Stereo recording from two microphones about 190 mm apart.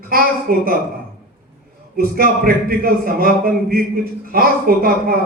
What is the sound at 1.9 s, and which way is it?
A man's voice, 50° right (ahead or behind).